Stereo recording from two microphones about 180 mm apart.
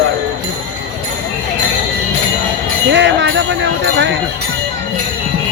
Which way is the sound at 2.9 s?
80° right.